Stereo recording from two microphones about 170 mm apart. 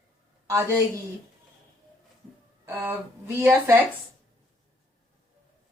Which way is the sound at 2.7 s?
10° right (ahead or behind).